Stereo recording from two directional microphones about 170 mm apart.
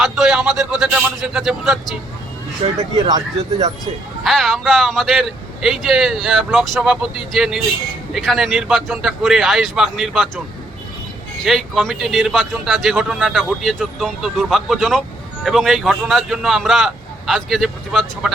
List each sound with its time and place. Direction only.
0.0 s a sound: centre (ahead or behind)
4.2 s a man's voice: centre (ahead or behind)
11.4 s a man's voice: centre (ahead or behind)